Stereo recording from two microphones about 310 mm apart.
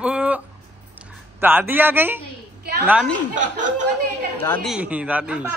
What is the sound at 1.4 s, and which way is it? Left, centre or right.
A man's voice, centre.